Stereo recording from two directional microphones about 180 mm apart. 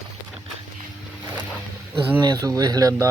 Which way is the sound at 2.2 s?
20° right (ahead or behind).